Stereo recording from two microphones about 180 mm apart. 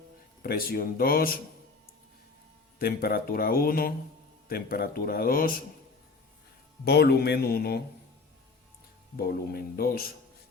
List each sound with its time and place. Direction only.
0.4 s speech: 55° left (ahead or behind)
2.7 s speech: 55° left (ahead or behind)
6.8 s speech: 65° left (ahead or behind)
9.1 s speech: 60° left (ahead or behind)